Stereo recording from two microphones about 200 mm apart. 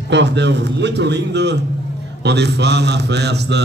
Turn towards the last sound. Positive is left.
turn(degrees=-55)  # may be behind; listen again after turning